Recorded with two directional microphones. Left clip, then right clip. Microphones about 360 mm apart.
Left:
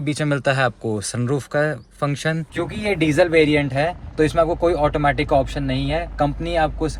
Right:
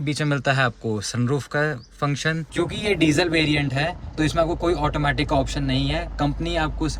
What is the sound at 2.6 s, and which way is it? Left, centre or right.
Speech, centre.